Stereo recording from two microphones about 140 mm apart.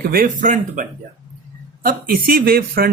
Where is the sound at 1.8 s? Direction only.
90° right.